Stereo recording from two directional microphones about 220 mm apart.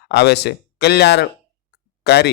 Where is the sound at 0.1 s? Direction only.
50° left (ahead or behind).